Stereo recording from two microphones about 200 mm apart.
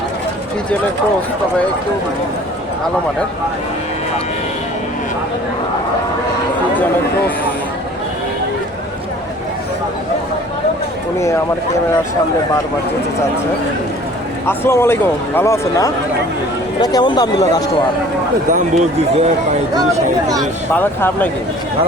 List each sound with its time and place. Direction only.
14.4 s speech: 10° left (ahead or behind)
18.5 s a man's voice: 35° right (ahead or behind)
20.4 s speech: 10° left (ahead or behind)